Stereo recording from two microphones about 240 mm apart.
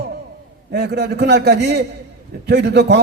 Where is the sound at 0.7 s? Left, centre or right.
Right.